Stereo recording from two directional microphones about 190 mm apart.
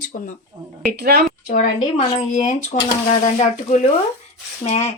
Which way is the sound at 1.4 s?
40° left (ahead or behind).